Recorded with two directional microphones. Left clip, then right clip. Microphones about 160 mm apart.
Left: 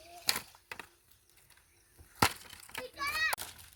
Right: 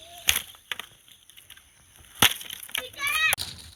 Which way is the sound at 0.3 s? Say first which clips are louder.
Right 10 dB; centre (ahead or behind).